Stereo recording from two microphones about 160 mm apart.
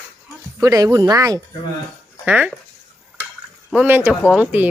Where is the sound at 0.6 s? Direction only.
20° right (ahead or behind).